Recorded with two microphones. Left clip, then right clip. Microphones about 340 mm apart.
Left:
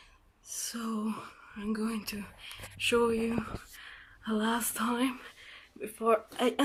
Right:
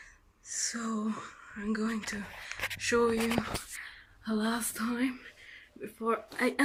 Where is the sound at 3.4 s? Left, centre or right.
Right.